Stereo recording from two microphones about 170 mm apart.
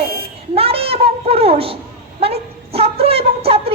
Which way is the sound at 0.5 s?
35° right (ahead or behind).